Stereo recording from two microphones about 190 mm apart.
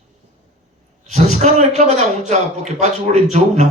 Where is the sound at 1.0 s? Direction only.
35° right (ahead or behind).